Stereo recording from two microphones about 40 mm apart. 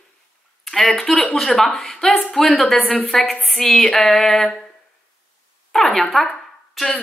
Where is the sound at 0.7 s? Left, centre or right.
Centre.